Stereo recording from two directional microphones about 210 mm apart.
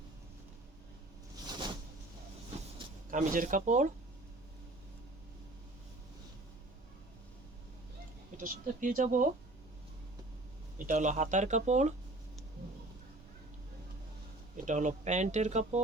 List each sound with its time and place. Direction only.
1.5 s a sound: 20° right (ahead or behind)
3.1 s speech: 40° right (ahead or behind)
8.4 s speech: 40° right (ahead or behind)
10.8 s speech: 35° right (ahead or behind)
14.5 s speech: 35° right (ahead or behind)